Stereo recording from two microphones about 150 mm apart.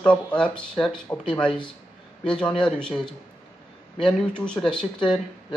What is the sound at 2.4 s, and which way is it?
A man's voice, 5° left (ahead or behind).